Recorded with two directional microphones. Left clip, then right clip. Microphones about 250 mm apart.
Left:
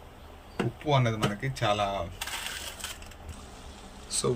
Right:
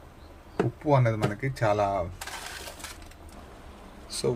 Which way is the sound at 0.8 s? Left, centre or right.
Right.